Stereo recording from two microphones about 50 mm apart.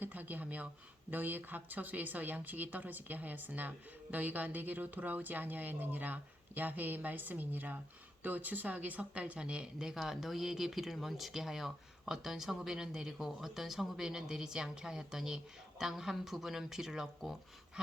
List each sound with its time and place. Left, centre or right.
0.0 s speech: right; by 10.0 s centre
10.0 s speech: centre